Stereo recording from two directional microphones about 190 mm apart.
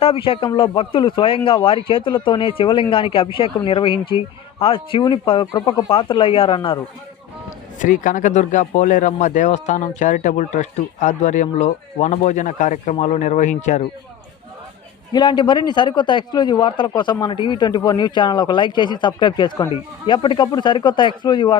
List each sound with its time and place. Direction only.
0.0 s a man's voice: 30° left (ahead or behind)
7.8 s speech: 45° left (ahead or behind)
15.1 s a man's voice: 25° left (ahead or behind)